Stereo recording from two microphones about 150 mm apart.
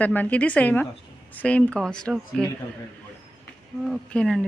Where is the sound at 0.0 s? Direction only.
10° left (ahead or behind).